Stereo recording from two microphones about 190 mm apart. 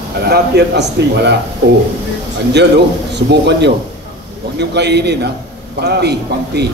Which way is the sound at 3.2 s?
65° right (ahead or behind).